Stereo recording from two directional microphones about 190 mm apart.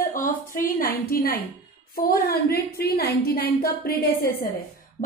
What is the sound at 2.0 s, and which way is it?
A woman's voice, 55° left (ahead or behind).